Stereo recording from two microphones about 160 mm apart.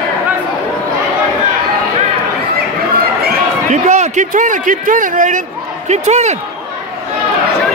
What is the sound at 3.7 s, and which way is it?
A man's voice, 45° right (ahead or behind).